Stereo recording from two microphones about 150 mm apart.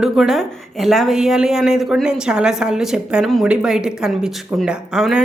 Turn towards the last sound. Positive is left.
turn(degrees=-5)  # may be behind; listen again after turning